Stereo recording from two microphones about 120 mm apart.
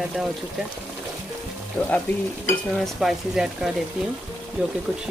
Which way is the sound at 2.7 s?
Centre (ahead or behind).